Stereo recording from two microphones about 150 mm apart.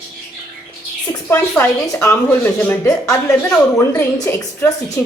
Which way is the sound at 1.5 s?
10° left (ahead or behind).